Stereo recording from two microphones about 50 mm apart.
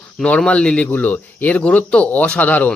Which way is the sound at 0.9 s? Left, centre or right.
Left.